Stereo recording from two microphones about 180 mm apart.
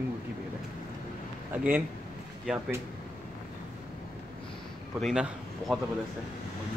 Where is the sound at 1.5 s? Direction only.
10° right (ahead or behind).